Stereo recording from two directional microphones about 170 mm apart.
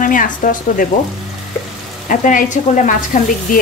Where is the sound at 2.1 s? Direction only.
50° left (ahead or behind).